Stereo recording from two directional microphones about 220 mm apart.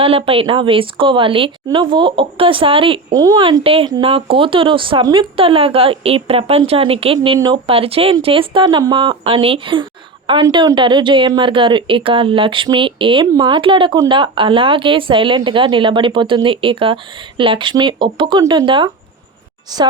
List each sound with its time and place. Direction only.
0.0 s a woman's voice: 25° right (ahead or behind)